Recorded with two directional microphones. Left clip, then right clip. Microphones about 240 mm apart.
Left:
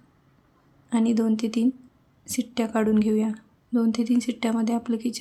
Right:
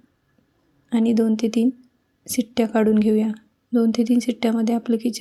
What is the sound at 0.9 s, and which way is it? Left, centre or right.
A woman's voice, centre.